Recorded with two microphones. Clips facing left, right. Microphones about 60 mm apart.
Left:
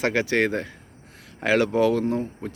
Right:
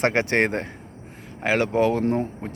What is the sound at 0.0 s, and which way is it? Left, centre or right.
Speech, right.